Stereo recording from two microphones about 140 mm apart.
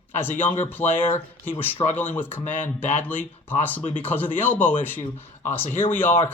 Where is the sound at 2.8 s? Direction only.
10° left (ahead or behind).